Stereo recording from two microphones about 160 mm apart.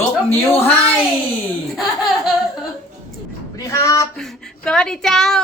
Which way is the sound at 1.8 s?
Centre (ahead or behind).